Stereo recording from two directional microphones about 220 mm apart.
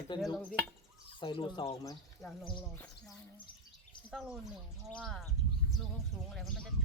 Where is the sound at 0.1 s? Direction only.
20° left (ahead or behind).